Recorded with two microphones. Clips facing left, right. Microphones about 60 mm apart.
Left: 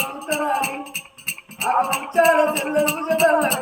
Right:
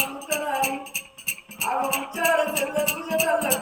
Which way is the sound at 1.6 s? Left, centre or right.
Left.